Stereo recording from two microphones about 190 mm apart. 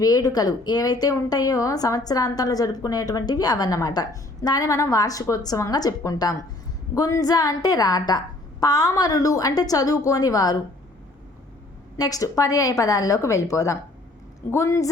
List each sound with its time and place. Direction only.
0.0 s a woman's voice: 20° left (ahead or behind)
11.9 s a woman's voice: 20° left (ahead or behind)